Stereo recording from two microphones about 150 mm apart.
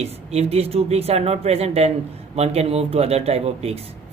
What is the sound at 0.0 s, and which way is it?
A man's voice, 45° right (ahead or behind).